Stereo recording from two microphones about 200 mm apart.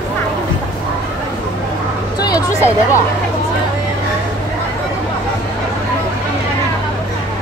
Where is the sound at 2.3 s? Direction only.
20° left (ahead or behind).